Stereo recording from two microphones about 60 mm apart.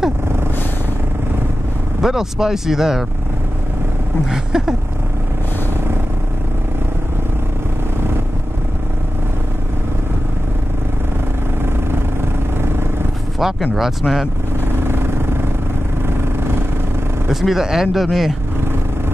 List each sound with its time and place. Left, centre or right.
2.0 s speech: centre
4.3 s speech: centre
13.4 s speech: centre
14.8 s vehicle: right
17.3 s speech: centre